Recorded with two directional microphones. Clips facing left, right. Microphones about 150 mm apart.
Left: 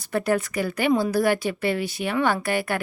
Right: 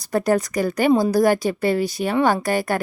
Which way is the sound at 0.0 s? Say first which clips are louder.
Right 4 dB; 40° right (ahead or behind).